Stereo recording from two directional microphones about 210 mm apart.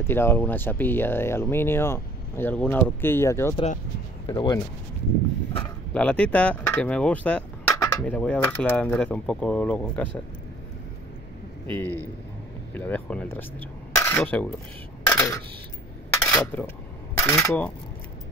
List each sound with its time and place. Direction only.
0.0 s speech: 10° left (ahead or behind)
4.3 s speech: 25° left (ahead or behind)
5.9 s speech: 5° left (ahead or behind)
11.6 s speech: 10° left (ahead or behind)
15.0 s a sound: 10° left (ahead or behind)
16.1 s dishes: 10° left (ahead or behind)
17.2 s speech: 15° left (ahead or behind)